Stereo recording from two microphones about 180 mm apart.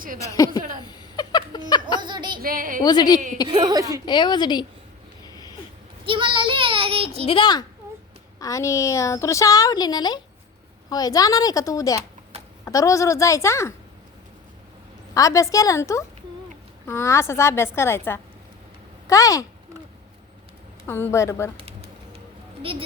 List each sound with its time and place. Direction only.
0.2 s a woman's voice: 20° left (ahead or behind)
0.8 s a sound: 25° left (ahead or behind)
2.0 s a sound: 25° right (ahead or behind)
2.4 s a woman's voice: 50° right (ahead or behind)
2.8 s a woman's voice: 20° left (ahead or behind)
3.5 s a woman's voice: 25° right (ahead or behind)
4.0 s a woman's voice: 25° left (ahead or behind)
5.2 s a sound: 20° left (ahead or behind)
6.1 s child singing: 30° right (ahead or behind)
7.3 s a woman's voice: 25° left (ahead or behind)
15.1 s a woman's voice: 20° left (ahead or behind)
20.8 s a woman's voice: 15° left (ahead or behind)
21.6 s a sound: 35° right (ahead or behind)